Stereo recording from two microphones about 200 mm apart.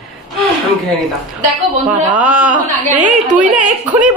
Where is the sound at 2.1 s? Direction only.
5° right (ahead or behind).